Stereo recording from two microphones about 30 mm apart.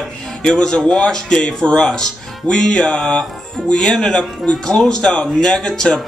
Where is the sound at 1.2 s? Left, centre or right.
Left.